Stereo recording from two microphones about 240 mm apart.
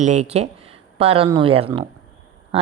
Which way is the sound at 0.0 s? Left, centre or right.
Right.